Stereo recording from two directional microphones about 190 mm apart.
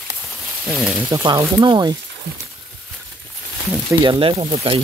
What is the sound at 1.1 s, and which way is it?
Speech, 20° right (ahead or behind).